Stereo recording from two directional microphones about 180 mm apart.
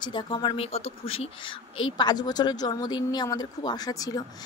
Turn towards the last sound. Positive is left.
turn(degrees=20)  # may be behind; listen again after turning